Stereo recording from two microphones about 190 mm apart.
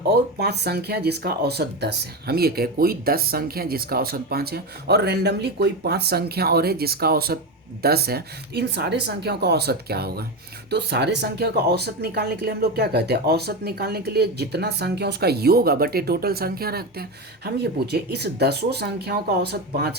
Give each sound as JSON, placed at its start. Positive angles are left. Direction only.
{"t": 0.1, "sound": "speech", "side_deg": -60}